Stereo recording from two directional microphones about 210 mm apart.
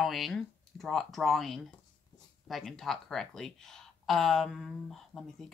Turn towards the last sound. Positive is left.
turn(degrees=0)  # may be behind; listen again after turning